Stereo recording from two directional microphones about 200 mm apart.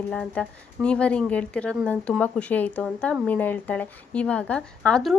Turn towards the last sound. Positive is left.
turn(degrees=5)  # may be behind; listen again after turning